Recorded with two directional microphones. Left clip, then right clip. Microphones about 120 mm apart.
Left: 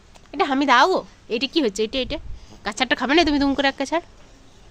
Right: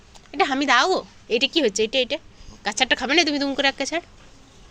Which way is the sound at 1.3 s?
15° left (ahead or behind).